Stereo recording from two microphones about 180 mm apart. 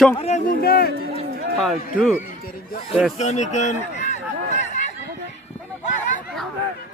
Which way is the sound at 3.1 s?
40° left (ahead or behind).